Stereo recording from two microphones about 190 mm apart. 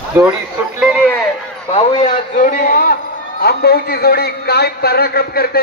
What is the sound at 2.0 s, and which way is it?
A man's voice, 45° left (ahead or behind).